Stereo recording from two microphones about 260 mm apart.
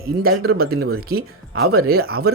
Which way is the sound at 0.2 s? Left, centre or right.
Right.